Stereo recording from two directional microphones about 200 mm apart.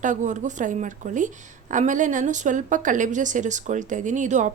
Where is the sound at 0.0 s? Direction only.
40° right (ahead or behind).